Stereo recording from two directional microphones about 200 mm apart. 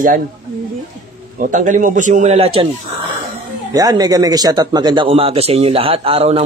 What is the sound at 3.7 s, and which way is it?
A man's voice, 20° right (ahead or behind).